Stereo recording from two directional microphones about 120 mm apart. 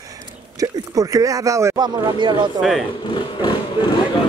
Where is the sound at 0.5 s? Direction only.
30° right (ahead or behind).